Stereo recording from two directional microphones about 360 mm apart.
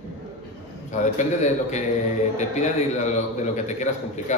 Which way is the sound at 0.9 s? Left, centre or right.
Centre.